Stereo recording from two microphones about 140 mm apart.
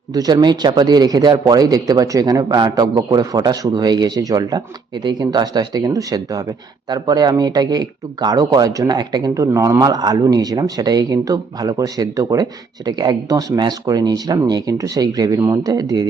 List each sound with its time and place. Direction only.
0.1 s speech: 25° right (ahead or behind)